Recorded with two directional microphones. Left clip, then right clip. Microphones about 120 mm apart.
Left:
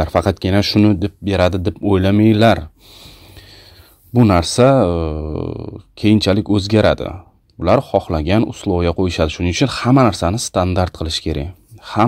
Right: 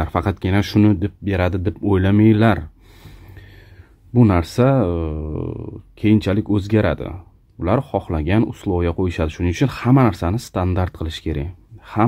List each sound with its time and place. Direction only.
0.0 s speech: 20° left (ahead or behind)
4.1 s speech: 30° left (ahead or behind)